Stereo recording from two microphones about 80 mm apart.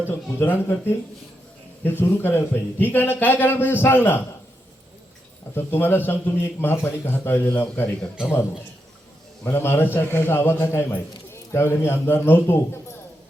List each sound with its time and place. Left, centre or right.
0.1 s a man's voice: left
5.5 s a man's voice: left
9.4 s a man's voice: left